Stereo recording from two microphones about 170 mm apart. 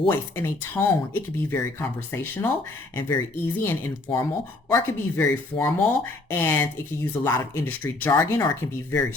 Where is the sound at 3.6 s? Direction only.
15° left (ahead or behind).